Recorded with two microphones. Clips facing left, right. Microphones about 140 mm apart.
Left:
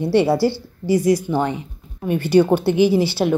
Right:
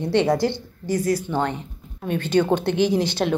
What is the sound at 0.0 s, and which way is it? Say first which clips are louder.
Speech: left 3 dB; 5° left (ahead or behind).